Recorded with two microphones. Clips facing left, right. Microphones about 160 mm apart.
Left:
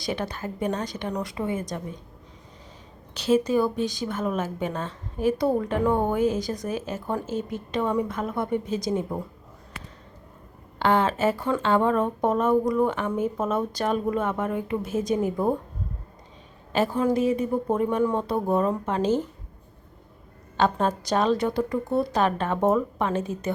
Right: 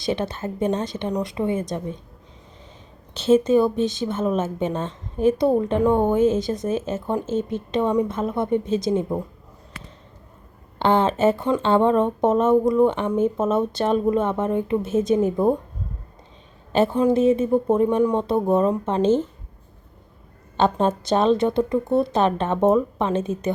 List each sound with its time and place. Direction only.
0.0 s a woman's voice: 25° right (ahead or behind)
3.2 s a woman's voice: 25° right (ahead or behind)
10.8 s a woman's voice: 25° right (ahead or behind)
16.7 s a woman's voice: 25° right (ahead or behind)
20.6 s a woman's voice: 25° right (ahead or behind)